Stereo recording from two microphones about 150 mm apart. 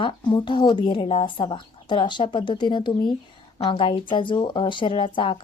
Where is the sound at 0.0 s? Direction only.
35° left (ahead or behind).